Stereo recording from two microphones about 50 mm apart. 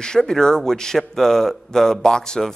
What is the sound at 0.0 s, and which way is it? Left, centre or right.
A man's voice, centre.